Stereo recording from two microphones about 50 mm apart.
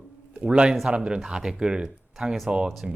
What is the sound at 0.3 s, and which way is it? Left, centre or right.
A man's voice, centre.